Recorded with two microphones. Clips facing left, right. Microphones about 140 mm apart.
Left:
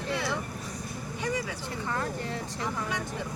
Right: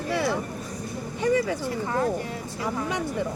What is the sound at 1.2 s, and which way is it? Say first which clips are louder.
Speech: right 10 dB; 50° right (ahead or behind).